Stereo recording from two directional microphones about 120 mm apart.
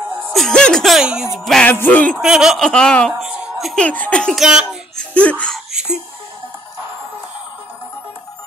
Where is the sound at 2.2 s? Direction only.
5° right (ahead or behind).